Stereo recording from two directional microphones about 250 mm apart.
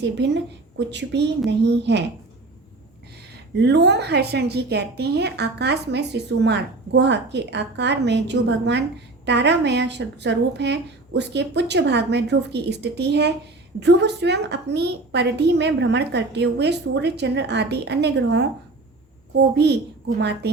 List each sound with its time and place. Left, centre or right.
0.8 s a woman's voice: right
3.6 s a woman's voice: right